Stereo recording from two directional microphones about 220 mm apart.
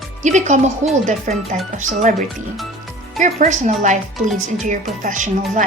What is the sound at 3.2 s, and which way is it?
Speech, 35° right (ahead or behind).